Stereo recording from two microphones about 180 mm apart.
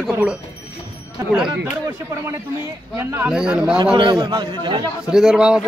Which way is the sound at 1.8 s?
15° right (ahead or behind).